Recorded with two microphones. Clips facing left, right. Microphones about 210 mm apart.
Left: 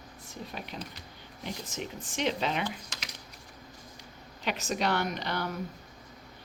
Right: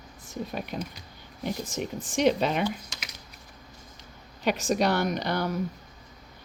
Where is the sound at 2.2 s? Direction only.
45° right (ahead or behind).